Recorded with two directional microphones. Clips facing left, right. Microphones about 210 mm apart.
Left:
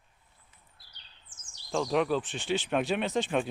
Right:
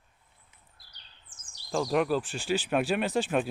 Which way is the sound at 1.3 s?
60° right (ahead or behind).